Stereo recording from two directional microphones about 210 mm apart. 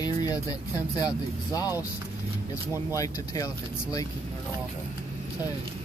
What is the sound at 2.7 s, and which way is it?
Speech, 15° left (ahead or behind).